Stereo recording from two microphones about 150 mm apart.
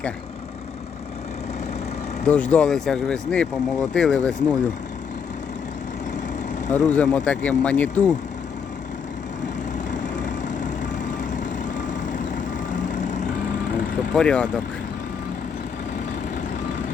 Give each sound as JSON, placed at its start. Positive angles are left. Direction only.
{"t": 2.2, "sound": "speech", "side_deg": 10}
{"t": 6.7, "sound": "speech", "side_deg": 10}
{"t": 14.1, "sound": "speech", "side_deg": 5}